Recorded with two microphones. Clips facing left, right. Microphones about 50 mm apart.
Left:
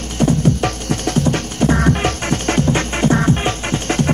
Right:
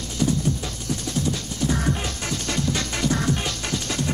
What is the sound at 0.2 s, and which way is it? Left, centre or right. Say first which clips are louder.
Music: left 8 dB; left.